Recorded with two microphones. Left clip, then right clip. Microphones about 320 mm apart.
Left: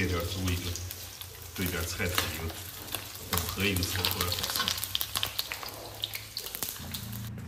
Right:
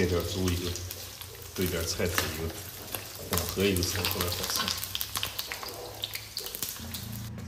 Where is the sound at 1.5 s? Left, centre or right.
Centre.